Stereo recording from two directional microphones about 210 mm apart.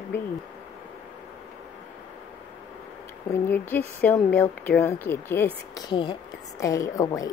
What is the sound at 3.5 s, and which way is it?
Speech, 10° left (ahead or behind).